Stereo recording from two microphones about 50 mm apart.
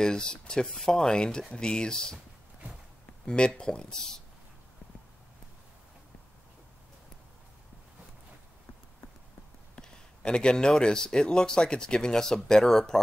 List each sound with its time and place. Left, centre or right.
0.0 s speech: centre
3.3 s speech: centre
9.8 s speech: centre